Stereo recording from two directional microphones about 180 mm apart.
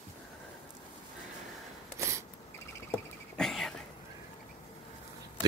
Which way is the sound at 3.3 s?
Centre (ahead or behind).